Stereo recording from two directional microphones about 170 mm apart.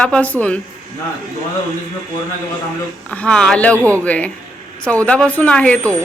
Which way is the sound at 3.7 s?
15° right (ahead or behind).